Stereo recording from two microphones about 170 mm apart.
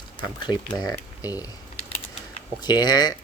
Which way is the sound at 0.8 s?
20° left (ahead or behind).